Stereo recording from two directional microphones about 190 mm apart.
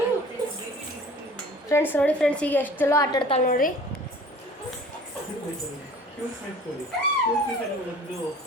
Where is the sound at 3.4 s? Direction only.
45° left (ahead or behind).